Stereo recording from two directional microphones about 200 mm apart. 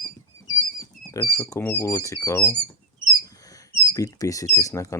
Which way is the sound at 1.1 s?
15° left (ahead or behind).